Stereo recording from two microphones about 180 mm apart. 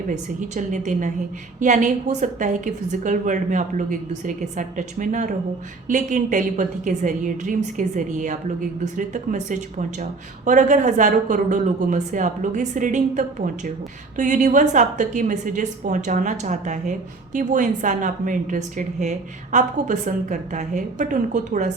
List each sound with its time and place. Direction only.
0.1 s speech: 40° right (ahead or behind)